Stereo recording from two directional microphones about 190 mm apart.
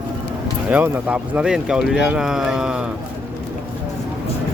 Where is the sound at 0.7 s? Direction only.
5° right (ahead or behind).